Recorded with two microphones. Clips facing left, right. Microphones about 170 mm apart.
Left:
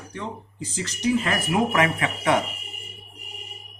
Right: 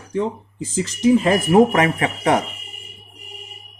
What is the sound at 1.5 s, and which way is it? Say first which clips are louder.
Speech: right 7 dB; 40° right (ahead or behind).